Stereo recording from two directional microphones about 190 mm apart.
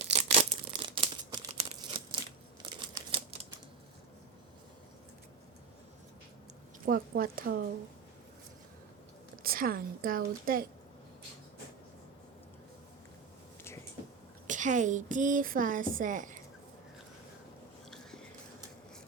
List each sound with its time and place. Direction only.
0.0 s tearing: 35° right (ahead or behind)
2.6 s crumpling: 25° right (ahead or behind)
6.8 s a woman's voice: 50° right (ahead or behind)
9.3 s speech: 50° right (ahead or behind)
14.4 s a woman's voice: 40° right (ahead or behind)